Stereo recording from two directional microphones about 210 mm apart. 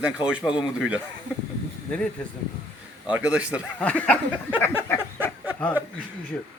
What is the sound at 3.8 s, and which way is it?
Speech, 5° left (ahead or behind).